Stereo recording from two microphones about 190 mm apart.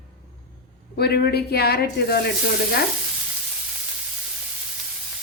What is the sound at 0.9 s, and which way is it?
Speech, 60° left (ahead or behind).